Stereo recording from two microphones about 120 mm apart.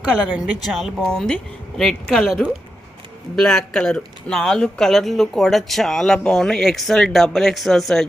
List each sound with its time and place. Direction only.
0.1 s speech: 10° right (ahead or behind)